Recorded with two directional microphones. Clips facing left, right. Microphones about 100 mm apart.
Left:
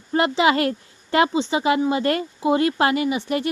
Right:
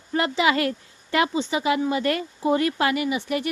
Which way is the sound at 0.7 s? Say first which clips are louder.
Left 3 dB; 30° left (ahead or behind).